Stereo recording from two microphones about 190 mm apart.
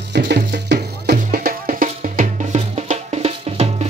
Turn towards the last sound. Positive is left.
turn(degrees=-35)  # may be behind; listen again after turning